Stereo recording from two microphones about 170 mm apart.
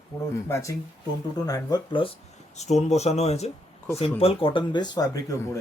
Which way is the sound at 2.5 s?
40° left (ahead or behind).